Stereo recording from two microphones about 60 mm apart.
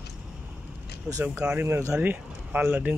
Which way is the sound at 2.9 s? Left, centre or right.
Right.